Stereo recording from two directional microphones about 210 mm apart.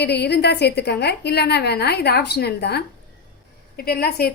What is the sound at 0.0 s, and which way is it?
A woman's voice, 50° left (ahead or behind).